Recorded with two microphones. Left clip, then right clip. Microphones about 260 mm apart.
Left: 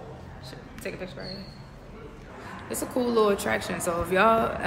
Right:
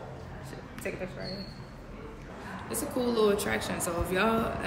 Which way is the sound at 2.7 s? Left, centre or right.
Left.